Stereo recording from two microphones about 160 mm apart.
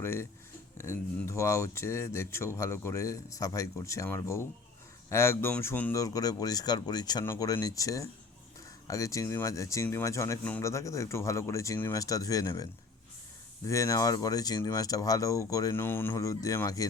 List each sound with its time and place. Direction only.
0.0 s speech: 15° left (ahead or behind)
13.7 s speech: 20° left (ahead or behind)